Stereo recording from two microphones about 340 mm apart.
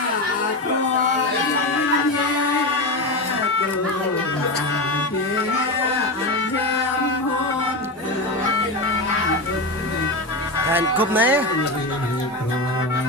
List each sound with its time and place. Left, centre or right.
10.7 s speech: centre